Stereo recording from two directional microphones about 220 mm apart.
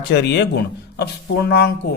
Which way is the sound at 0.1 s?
50° left (ahead or behind).